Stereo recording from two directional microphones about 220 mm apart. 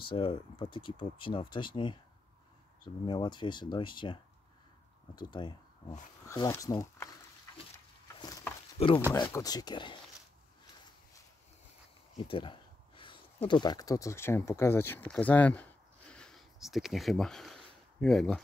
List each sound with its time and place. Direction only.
0.0 s speech: 25° left (ahead or behind)
3.1 s speech: 20° left (ahead or behind)
8.2 s a sound: 20° left (ahead or behind)
9.1 s speech: 15° left (ahead or behind)
12.2 s speech: 25° left (ahead or behind); by 18.4 s centre (ahead or behind)